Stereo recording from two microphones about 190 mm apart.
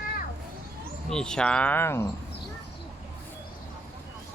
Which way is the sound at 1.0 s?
5° left (ahead or behind).